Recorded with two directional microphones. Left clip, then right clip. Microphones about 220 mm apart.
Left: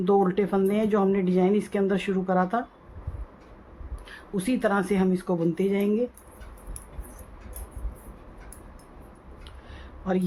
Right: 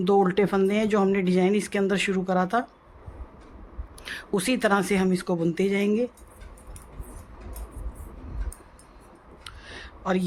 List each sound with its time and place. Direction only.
0.0 s speech: 45° right (ahead or behind)
4.0 s speech: 50° right (ahead or behind)
9.4 s a sound: 50° right (ahead or behind)